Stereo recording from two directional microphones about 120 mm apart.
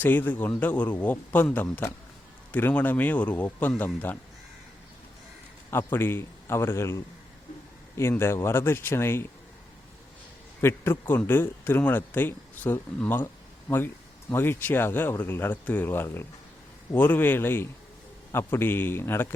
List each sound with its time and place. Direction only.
0.0 s speech: 15° left (ahead or behind)
5.7 s a man's voice: 20° left (ahead or behind)
10.6 s a man's voice: 20° left (ahead or behind)